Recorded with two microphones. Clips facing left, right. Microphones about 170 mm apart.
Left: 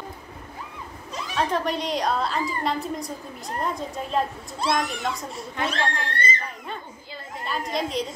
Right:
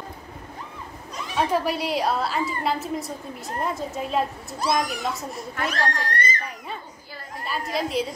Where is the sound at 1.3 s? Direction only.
5° right (ahead or behind).